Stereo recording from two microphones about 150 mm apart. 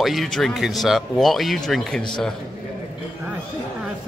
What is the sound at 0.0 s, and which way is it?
Speech, centre (ahead or behind).